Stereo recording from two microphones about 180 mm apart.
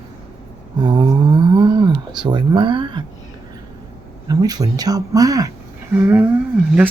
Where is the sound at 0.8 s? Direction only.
25° right (ahead or behind).